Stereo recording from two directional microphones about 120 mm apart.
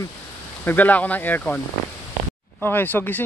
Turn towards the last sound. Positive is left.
turn(degrees=15)  # may be behind; listen again after turning